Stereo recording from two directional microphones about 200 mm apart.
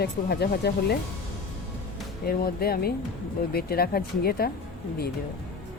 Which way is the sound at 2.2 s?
50° left (ahead or behind).